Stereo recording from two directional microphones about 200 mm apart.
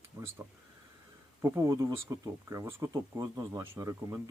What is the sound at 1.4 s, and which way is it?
Speech, 15° right (ahead or behind).